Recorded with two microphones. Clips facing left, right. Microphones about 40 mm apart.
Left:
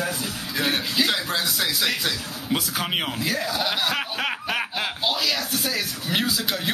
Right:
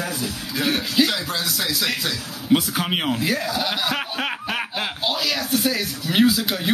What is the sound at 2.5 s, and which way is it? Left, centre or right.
Speech, centre.